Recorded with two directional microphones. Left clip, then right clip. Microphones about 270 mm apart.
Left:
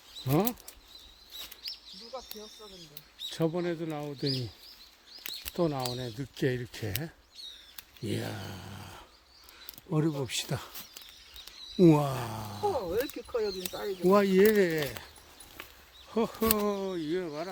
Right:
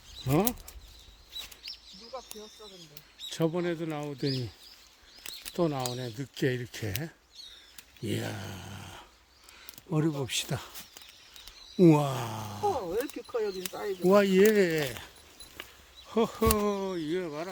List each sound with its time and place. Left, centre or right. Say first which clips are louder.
0.3 s speech: right 1 dB; centre
3.2 s speech: right 1 dB; centre
5.5 s speech: right 1 dB; centre
11.8 s speech: right 1 dB; centre
14.0 s speech: right 1 dB; centre